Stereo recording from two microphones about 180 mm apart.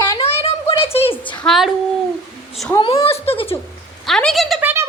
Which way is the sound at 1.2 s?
5° left (ahead or behind).